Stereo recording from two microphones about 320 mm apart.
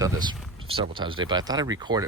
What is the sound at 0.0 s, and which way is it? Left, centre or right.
Speech, centre.